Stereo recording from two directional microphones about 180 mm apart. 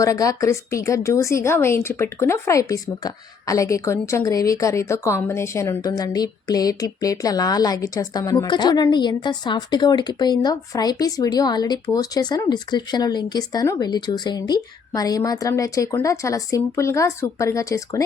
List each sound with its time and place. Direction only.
0.0 s a woman's voice: 20° left (ahead or behind)